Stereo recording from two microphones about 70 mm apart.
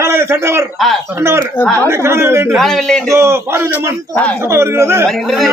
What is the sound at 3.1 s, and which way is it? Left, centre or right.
Speech, right.